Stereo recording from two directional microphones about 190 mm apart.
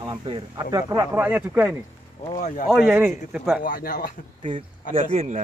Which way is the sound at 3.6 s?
50° left (ahead or behind).